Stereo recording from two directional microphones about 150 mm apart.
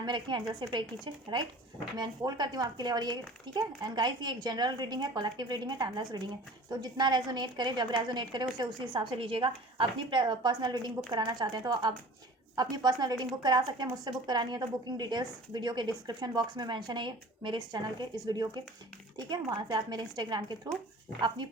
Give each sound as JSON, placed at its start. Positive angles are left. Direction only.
{"t": 0.0, "sound": "a woman's voice", "side_deg": -30}